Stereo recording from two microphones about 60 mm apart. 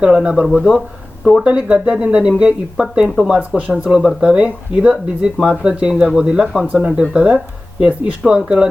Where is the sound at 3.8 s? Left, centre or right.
Centre.